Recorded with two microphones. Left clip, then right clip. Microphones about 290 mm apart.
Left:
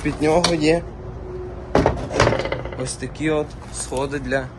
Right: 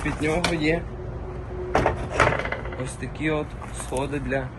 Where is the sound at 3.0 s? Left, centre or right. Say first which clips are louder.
Left 5 dB; centre.